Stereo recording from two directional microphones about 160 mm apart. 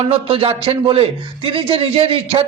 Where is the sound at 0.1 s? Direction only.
35° right (ahead or behind).